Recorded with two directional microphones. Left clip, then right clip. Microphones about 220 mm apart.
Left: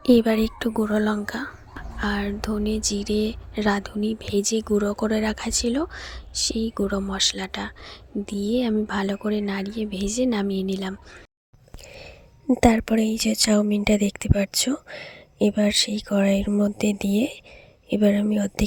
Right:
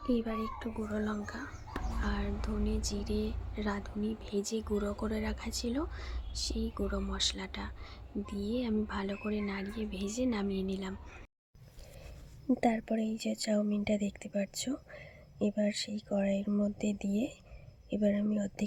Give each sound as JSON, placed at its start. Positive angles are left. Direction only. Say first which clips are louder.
{"t": 0.0, "sound": "speech", "louder": "left 16 dB", "side_deg": 45}
{"t": 12.5, "sound": "speech", "louder": "left 13 dB", "side_deg": 40}